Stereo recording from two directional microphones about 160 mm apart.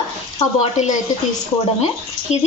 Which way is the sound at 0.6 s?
45° left (ahead or behind).